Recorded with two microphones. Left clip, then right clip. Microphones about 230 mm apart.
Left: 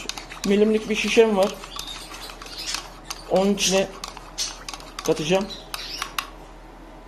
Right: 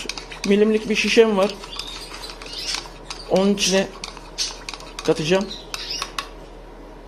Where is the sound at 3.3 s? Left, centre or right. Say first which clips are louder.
Right 2 dB; centre.